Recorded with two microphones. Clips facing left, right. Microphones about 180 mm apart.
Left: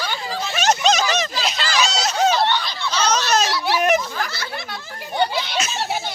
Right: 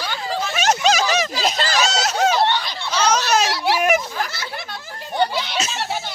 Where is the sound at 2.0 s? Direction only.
10° right (ahead or behind).